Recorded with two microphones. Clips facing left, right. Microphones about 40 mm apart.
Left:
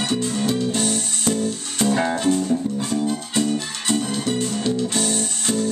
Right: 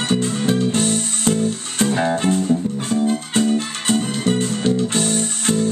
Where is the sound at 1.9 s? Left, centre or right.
Centre.